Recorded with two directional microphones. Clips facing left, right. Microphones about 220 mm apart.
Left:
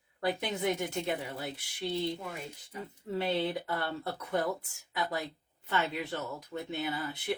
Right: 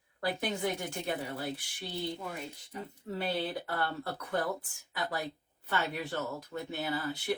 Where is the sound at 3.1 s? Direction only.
20° left (ahead or behind).